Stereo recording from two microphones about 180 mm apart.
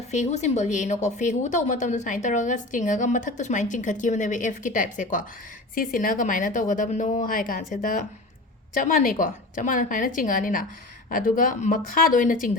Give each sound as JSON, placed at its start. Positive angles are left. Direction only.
{"t": 0.1, "sound": "a woman's voice", "side_deg": 40}